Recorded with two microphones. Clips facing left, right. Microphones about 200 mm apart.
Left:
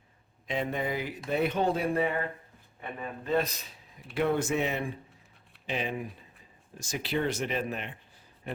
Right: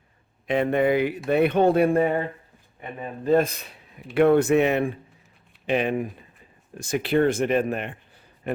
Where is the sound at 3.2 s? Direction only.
50° right (ahead or behind).